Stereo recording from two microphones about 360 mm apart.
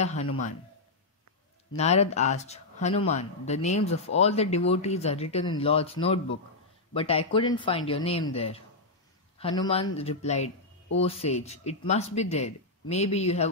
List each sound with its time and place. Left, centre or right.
0.0 s a man's voice: centre
1.8 s speech: centre